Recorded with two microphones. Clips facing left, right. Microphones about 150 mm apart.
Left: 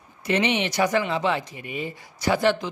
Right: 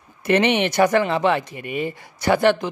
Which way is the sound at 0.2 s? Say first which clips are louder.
Right 5 dB; 60° right (ahead or behind).